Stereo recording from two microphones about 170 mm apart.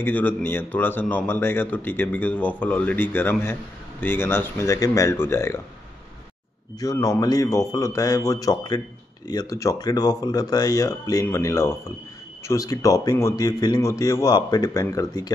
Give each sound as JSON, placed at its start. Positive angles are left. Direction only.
{"t": 0.0, "sound": "speech", "side_deg": 10}
{"t": 6.8, "sound": "speech", "side_deg": 20}